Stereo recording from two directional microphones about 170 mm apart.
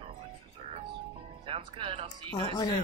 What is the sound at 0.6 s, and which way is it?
Music, 35° right (ahead or behind).